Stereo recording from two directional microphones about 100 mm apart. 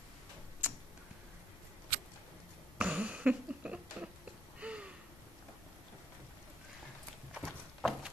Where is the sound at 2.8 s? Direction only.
10° right (ahead or behind).